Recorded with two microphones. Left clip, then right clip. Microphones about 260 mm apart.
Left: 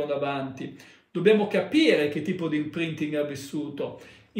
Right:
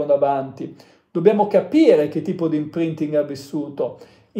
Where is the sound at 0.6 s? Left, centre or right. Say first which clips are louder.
Right 6 dB; centre.